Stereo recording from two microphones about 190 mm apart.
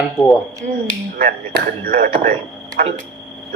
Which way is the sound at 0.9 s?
50° right (ahead or behind).